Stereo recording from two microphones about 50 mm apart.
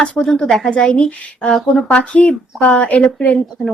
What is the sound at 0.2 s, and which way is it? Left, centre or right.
A woman's voice, centre.